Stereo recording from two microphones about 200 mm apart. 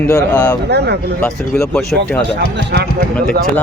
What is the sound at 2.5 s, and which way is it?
Speech, 55° right (ahead or behind).